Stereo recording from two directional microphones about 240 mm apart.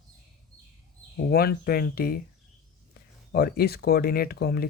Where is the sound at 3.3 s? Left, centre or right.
Left.